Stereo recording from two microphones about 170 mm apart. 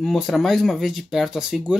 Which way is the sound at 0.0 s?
Centre (ahead or behind).